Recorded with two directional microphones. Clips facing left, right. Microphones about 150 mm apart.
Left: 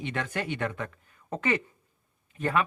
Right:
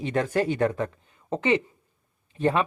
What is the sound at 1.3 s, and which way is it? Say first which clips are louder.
Speech: right 5 dB; 20° right (ahead or behind).